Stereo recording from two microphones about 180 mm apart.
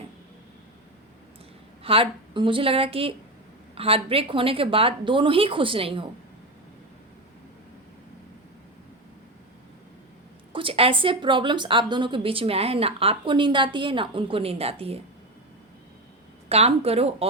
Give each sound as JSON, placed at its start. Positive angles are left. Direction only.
{"t": 1.8, "sound": "a woman's voice", "side_deg": -30}
{"t": 10.5, "sound": "a woman's voice", "side_deg": -30}
{"t": 16.5, "sound": "a woman's voice", "side_deg": -35}